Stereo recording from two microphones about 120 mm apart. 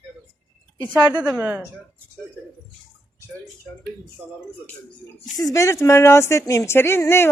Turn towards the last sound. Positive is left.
turn(degrees=20)  # may be behind; listen again after turning